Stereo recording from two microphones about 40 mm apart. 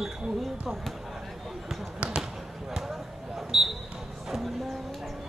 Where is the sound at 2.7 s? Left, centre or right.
Centre.